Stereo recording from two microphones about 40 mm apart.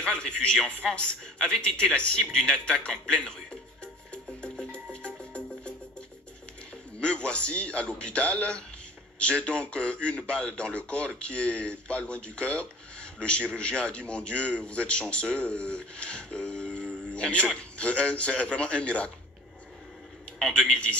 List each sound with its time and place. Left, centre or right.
0.0 s a man's voice: left
2.1 s music: left
7.0 s a man's voice: left
20.3 s a man's voice: centre